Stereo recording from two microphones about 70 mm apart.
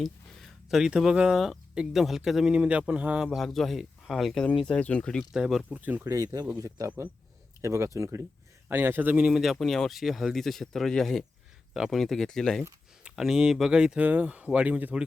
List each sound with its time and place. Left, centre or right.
0.7 s speech: centre
2.5 s speech: centre
3.3 s speech: centre
4.6 s speech: centre
5.3 s speech: centre
5.7 s speech: right
6.1 s speech: right
6.6 s speech: right
8.7 s a man's voice: right
9.1 s speech: centre
13.1 s speech: centre
14.0 s speech: right